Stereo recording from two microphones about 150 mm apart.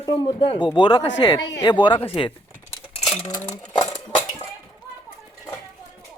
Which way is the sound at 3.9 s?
10° left (ahead or behind).